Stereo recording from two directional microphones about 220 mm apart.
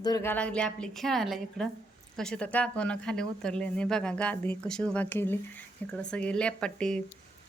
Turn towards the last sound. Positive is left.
turn(degrees=5)  # may be behind; listen again after turning